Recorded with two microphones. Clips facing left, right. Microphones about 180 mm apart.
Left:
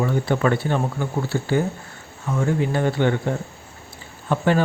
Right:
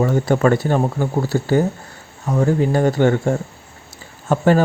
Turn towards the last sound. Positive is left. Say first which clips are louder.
# right 5 dB
turn(degrees=-40)  # may be behind; listen again after turning